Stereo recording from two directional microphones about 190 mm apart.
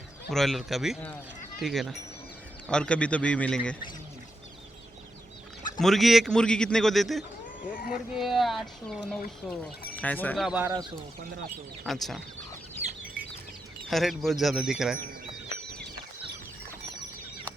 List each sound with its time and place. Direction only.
0.3 s a man's voice: centre (ahead or behind)
5.8 s a man's voice: centre (ahead or behind)
7.6 s speech: 45° left (ahead or behind)
8.1 s a man's voice: centre (ahead or behind)
10.4 s a man's voice: 5° right (ahead or behind)
10.7 s speech: 25° right (ahead or behind)
11.9 s a man's voice: centre (ahead or behind)
13.8 s a man's voice: centre (ahead or behind)